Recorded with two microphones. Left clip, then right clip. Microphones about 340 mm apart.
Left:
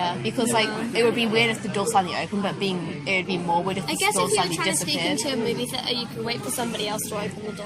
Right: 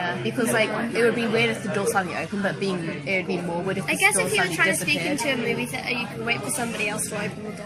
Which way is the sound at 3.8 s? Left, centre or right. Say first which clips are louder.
Right 2 dB; centre.